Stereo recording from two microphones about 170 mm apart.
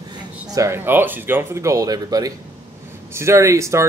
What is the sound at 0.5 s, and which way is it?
Speech, 15° right (ahead or behind).